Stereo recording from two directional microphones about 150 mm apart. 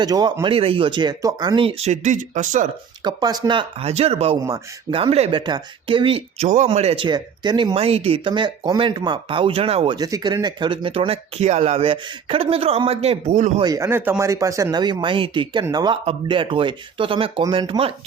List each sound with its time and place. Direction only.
0.0 s speech: 25° right (ahead or behind)
1.9 s speech: 55° right (ahead or behind)
3.0 s speech: 30° right (ahead or behind)
10.0 s speech: 25° right (ahead or behind); by 13.5 s 50° right (ahead or behind)
13.6 s speech: 25° right (ahead or behind)